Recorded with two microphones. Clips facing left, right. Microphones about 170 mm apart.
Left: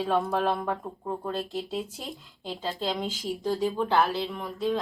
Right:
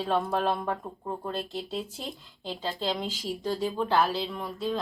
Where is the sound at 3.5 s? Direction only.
20° left (ahead or behind).